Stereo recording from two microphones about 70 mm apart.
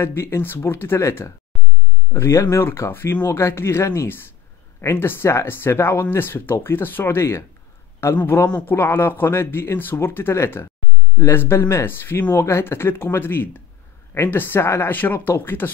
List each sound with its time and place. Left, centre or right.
0.0 s speech: left